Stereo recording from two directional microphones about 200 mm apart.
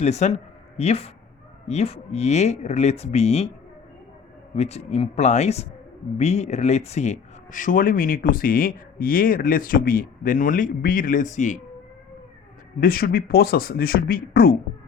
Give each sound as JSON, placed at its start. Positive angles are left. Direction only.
{"t": 0.0, "sound": "speech", "side_deg": 35}
{"t": 4.5, "sound": "speech", "side_deg": 30}
{"t": 12.8, "sound": "speech", "side_deg": 45}